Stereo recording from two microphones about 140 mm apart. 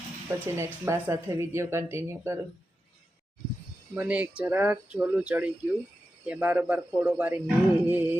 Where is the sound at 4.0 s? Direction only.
10° right (ahead or behind).